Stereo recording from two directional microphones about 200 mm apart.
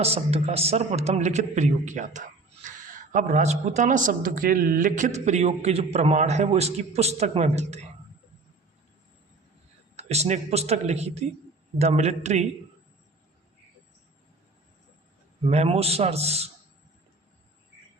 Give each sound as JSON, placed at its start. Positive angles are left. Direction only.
{"t": 0.0, "sound": "a man's voice", "side_deg": -30}
{"t": 9.9, "sound": "a man's voice", "side_deg": -30}
{"t": 15.4, "sound": "a man's voice", "side_deg": -30}